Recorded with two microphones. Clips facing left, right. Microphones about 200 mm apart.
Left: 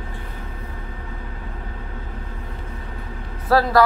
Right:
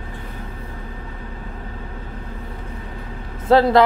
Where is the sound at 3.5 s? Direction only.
20° right (ahead or behind).